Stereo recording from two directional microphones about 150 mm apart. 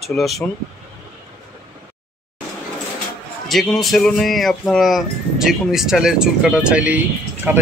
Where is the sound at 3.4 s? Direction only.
Centre (ahead or behind).